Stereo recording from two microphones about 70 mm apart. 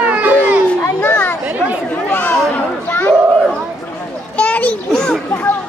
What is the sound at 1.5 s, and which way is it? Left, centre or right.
Chatter, right.